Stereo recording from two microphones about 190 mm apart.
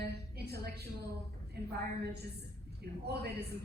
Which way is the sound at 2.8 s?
60° right (ahead or behind).